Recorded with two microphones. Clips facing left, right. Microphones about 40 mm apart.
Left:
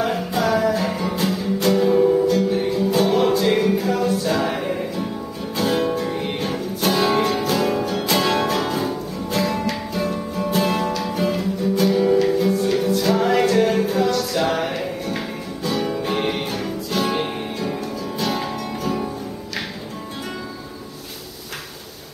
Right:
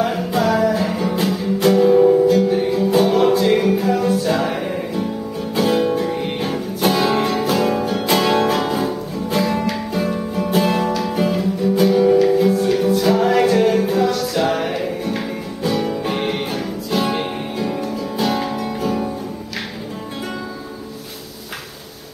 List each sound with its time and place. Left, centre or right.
0.0 s music: centre